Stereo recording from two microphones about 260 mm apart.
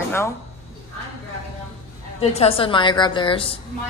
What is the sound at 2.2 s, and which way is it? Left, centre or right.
A woman's voice, left.